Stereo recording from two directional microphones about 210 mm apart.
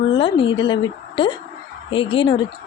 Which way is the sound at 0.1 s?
25° left (ahead or behind).